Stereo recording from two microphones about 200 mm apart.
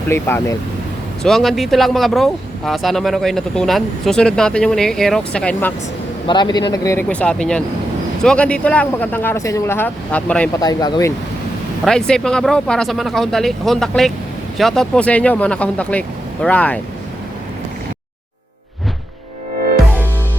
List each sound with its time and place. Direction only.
0.1 s speech: 10° left (ahead or behind)
1.2 s speech: centre (ahead or behind)
6.2 s speech: 20° left (ahead or behind); by 10.5 s 5° left (ahead or behind)
10.6 s speech: 20° left (ahead or behind)
11.9 s speech: 5° left (ahead or behind)